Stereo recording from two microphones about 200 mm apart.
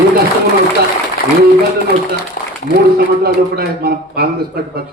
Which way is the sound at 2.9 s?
50° right (ahead or behind).